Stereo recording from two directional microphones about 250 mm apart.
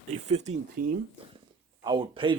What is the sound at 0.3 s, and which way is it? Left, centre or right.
Speech, right.